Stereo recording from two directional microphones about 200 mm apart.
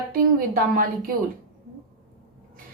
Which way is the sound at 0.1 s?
45° right (ahead or behind).